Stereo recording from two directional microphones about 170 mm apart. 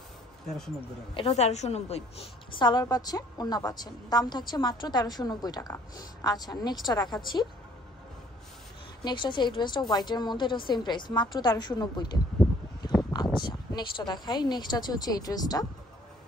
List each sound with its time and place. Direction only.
1.1 s a woman's voice: 35° left (ahead or behind)
2.5 s a woman's voice: 25° left (ahead or behind)
9.0 s a woman's voice: 30° left (ahead or behind)